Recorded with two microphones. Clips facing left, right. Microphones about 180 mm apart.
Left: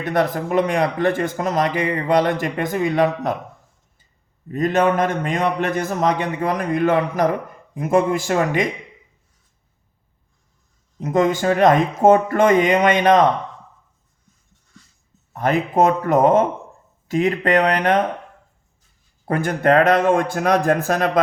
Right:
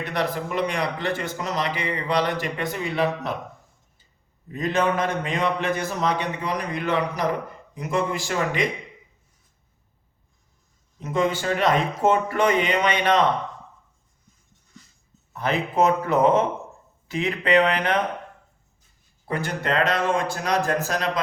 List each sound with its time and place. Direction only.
0.0 s speech: 45° left (ahead or behind)
4.5 s speech: 45° left (ahead or behind)
11.0 s speech: 45° left (ahead or behind)
15.3 s speech: 45° left (ahead or behind)
19.2 s a man's voice: 50° left (ahead or behind)